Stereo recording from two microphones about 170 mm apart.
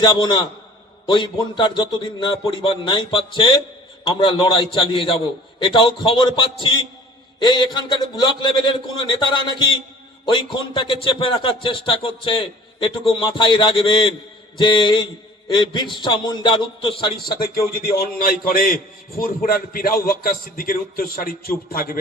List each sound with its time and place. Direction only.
0.0 s speech: 25° left (ahead or behind)
17.2 s a man's voice: 60° left (ahead or behind)